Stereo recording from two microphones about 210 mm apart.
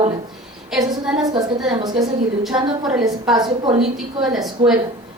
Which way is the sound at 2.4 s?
5° right (ahead or behind).